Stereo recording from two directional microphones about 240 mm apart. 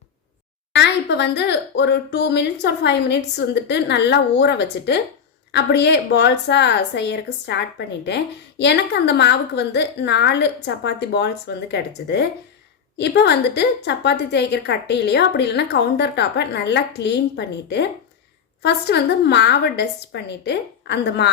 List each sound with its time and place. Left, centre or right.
0.7 s a woman's voice: left